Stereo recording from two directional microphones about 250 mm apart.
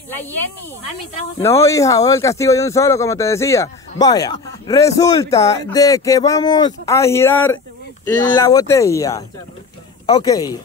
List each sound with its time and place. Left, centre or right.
0.1 s speech: centre
1.4 s speech: centre